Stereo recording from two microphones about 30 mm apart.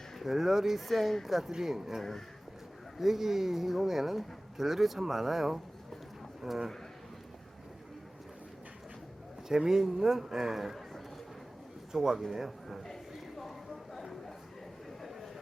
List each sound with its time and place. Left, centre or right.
0.2 s speech: centre
3.0 s a man's voice: centre
9.5 s speech: centre
11.9 s speech: centre